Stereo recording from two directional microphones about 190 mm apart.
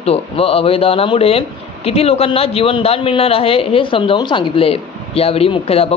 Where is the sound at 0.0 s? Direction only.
30° left (ahead or behind).